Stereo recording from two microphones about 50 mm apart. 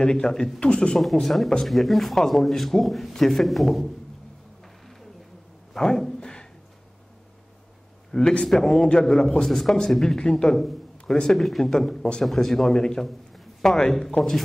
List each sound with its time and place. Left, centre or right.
0.0 s speech: centre
0.9 s a man's voice: centre
5.7 s a sound: centre
8.1 s speech: centre
8.5 s a man's voice: centre
13.0 s a man's voice: centre